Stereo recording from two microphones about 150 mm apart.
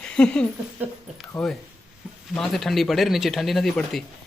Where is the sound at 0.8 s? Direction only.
10° right (ahead or behind).